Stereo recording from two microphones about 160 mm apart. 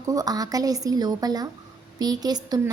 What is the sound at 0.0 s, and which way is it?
A woman's voice, 20° right (ahead or behind).